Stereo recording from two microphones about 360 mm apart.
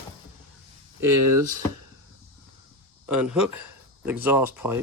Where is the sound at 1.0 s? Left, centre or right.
Right.